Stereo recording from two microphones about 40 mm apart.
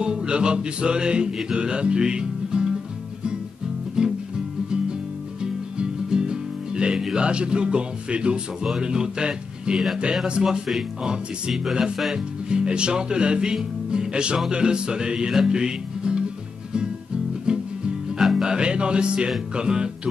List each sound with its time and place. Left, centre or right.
0.0 s music: right
4.0 s music: centre
5.4 s music: centre
7.2 s speech: right
12.1 s music: right
14.5 s speech: right
17.5 s music: right
19.5 s speech: right